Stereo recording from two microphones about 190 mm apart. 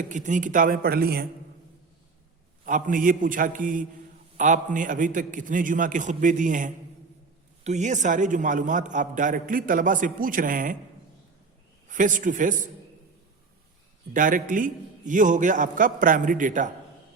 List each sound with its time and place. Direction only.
0.0 s a man's voice: 40° right (ahead or behind)
2.6 s a man's voice: 45° right (ahead or behind)
11.9 s a man's voice: 40° right (ahead or behind)
14.1 s a man's voice: 45° right (ahead or behind)